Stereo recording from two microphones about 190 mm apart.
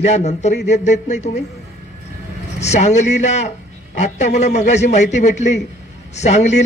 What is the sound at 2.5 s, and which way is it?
A man's voice, 35° left (ahead or behind).